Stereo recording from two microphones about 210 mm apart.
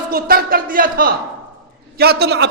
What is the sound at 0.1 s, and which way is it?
A man's voice, 45° right (ahead or behind).